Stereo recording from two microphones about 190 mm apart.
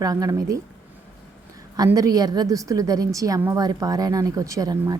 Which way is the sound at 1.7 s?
20° right (ahead or behind).